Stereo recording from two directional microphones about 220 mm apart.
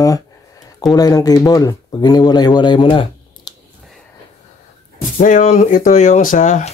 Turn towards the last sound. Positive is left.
turn(degrees=35)  # may be behind; listen again after turning